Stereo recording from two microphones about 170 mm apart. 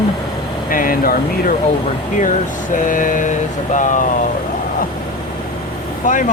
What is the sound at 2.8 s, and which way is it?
Vehicle, 50° left (ahead or behind).